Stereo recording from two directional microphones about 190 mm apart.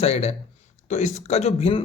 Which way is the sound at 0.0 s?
35° left (ahead or behind).